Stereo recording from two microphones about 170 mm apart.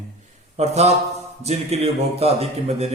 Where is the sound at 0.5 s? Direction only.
40° right (ahead or behind).